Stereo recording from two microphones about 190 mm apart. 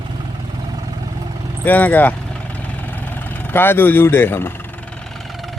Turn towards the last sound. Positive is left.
turn(degrees=10)  # may be behind; listen again after turning